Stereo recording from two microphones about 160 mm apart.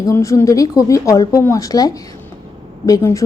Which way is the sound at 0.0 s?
20° left (ahead or behind).